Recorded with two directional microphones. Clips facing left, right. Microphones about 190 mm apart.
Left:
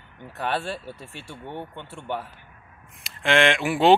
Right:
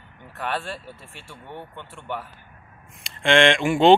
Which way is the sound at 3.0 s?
5° left (ahead or behind).